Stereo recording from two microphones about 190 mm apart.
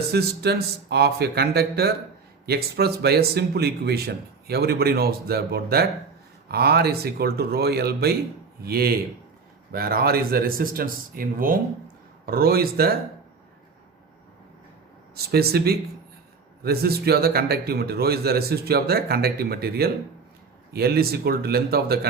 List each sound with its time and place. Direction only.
0.1 s speech: 60° right (ahead or behind)
15.1 s speech: 55° right (ahead or behind)